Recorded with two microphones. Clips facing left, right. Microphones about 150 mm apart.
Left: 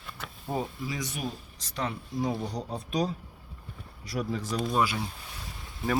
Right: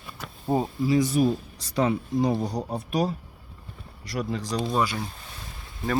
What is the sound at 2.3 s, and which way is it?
Speech, 40° right (ahead or behind).